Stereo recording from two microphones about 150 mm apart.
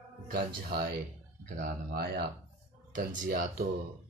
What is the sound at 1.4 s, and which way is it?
Speech, 70° right (ahead or behind).